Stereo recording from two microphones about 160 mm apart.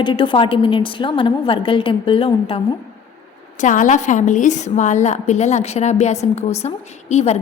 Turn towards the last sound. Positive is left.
turn(degrees=40)  # may be behind; listen again after turning